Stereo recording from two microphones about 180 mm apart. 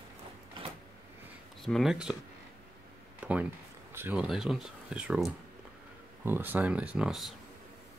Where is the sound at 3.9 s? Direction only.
10° right (ahead or behind).